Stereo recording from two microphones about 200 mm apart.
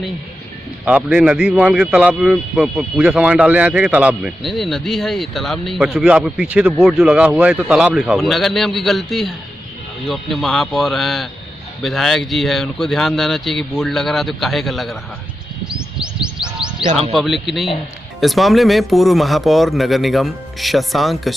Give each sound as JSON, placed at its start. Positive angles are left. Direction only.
{"t": 0.8, "sound": "speech", "side_deg": -5}
{"t": 15.7, "sound": "bird", "side_deg": -5}
{"t": 16.8, "sound": "speech", "side_deg": -30}
{"t": 17.1, "sound": "speech", "side_deg": 0}